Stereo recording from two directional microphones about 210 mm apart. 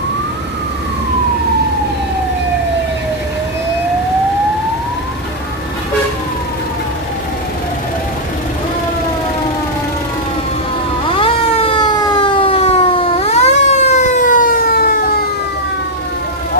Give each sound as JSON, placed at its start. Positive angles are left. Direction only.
{"t": 11.1, "sound": "siren", "side_deg": 25}